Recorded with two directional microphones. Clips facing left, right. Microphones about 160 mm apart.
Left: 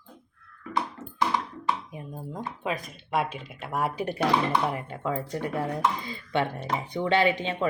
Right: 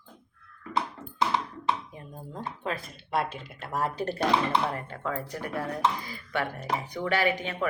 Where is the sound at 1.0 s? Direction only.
5° left (ahead or behind).